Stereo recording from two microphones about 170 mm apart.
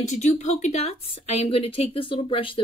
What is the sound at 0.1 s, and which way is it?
Speech, 45° left (ahead or behind).